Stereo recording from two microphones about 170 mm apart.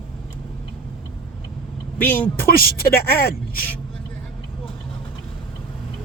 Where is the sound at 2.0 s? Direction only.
10° left (ahead or behind).